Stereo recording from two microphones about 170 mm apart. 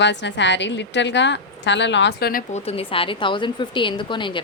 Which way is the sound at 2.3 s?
55° left (ahead or behind).